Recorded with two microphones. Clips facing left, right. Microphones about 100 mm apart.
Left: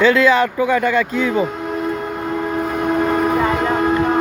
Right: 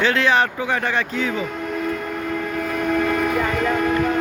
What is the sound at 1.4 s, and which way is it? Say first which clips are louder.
Train: left 4 dB; 30° left (ahead or behind).